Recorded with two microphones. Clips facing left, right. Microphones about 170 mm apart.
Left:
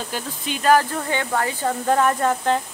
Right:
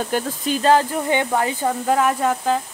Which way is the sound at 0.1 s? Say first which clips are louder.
Right 8 dB; 55° right (ahead or behind).